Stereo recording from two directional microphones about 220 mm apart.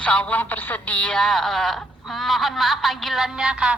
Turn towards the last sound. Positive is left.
turn(degrees=-5)  # may be behind; listen again after turning